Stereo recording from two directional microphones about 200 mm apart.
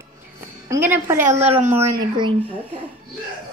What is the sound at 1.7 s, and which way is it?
Speech, 15° right (ahead or behind).